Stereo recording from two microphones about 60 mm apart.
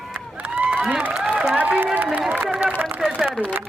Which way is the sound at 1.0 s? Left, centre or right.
Centre.